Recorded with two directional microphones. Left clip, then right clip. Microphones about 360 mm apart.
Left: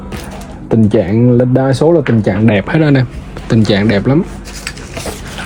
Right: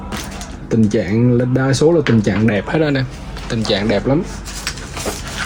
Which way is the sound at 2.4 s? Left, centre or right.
Centre.